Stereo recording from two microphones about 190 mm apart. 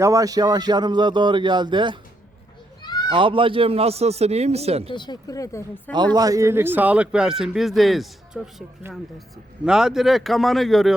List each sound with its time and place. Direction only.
0.0 s speech: 20° right (ahead or behind)
3.1 s a man's voice: 25° right (ahead or behind)
4.9 s speech: 25° left (ahead or behind)
6.1 s speech: 20° right (ahead or behind); by 8.6 s centre (ahead or behind)
9.6 s speech: 5° right (ahead or behind)